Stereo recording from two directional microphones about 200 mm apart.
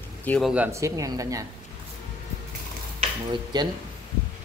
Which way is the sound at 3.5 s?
20° right (ahead or behind).